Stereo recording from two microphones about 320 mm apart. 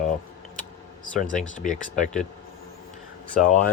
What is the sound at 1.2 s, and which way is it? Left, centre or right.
Speech, left.